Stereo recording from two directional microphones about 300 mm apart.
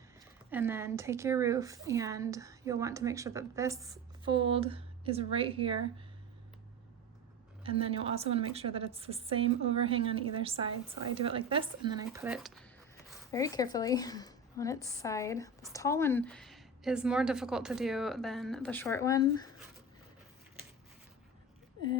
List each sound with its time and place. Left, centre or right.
0.5 s a woman's voice: centre
7.6 s a woman's voice: centre
13.3 s a woman's voice: centre